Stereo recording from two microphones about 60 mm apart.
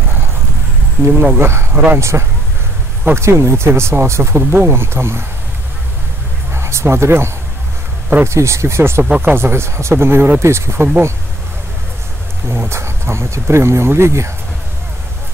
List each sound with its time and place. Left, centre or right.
1.2 s speech: right
6.5 s speech: right
12.4 s speech: right